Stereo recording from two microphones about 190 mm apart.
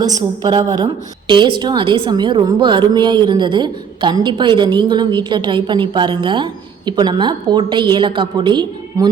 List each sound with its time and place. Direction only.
0.0 s a woman's voice: 20° right (ahead or behind)